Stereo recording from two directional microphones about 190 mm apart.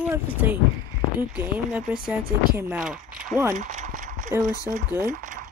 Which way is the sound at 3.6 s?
40° right (ahead or behind).